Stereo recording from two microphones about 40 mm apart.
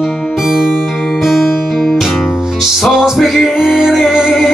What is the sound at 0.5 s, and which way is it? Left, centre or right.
Music, centre.